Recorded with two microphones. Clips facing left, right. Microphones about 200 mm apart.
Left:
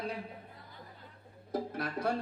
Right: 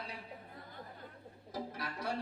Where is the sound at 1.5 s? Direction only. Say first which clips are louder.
Left 7 dB; 50° left (ahead or behind).